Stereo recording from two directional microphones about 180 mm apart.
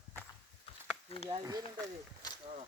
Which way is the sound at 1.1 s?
35° left (ahead or behind).